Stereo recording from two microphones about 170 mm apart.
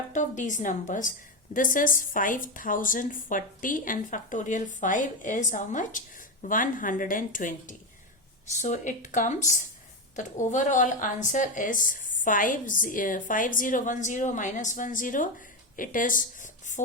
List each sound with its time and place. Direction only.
0.1 s a woman's voice: 45° left (ahead or behind)